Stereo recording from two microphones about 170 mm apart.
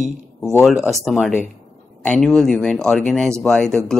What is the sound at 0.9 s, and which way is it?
Speech, centre (ahead or behind).